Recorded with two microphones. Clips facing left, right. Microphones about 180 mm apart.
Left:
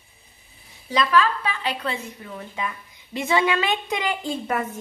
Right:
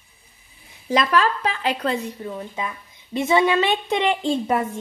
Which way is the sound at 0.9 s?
45° right (ahead or behind).